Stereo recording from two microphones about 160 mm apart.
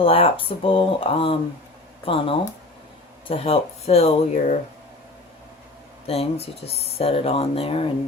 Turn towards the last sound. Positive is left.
turn(degrees=35)  # may be behind; listen again after turning